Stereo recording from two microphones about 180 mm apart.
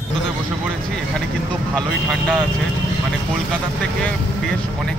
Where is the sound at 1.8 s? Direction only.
5° left (ahead or behind).